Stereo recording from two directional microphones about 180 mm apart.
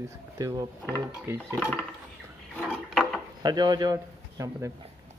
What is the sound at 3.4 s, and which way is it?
A man's voice, 25° right (ahead or behind).